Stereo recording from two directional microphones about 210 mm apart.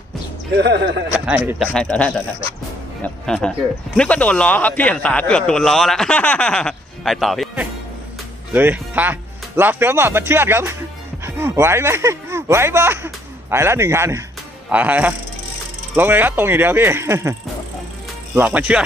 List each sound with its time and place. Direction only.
0.5 s speech: 55° right (ahead or behind)
1.5 s speech: 5° right (ahead or behind)
1.7 s a man's voice: 5° left (ahead or behind); by 17.3 s 15° right (ahead or behind)
18.3 s speech: 5° right (ahead or behind)